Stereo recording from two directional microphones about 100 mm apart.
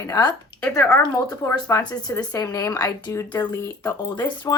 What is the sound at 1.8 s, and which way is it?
Speech, 40° left (ahead or behind).